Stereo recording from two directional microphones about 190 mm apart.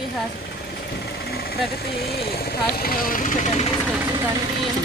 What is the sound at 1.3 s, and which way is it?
Speech, 55° left (ahead or behind).